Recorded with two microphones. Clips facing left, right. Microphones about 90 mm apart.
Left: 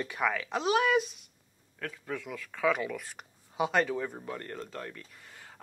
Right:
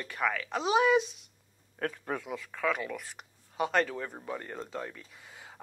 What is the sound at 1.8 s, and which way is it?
Speech, 40° right (ahead or behind).